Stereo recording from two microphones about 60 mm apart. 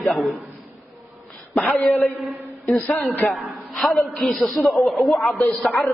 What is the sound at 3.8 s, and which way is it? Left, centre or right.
A man's voice, centre.